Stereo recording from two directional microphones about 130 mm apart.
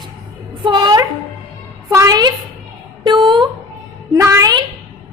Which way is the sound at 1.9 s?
25° right (ahead or behind).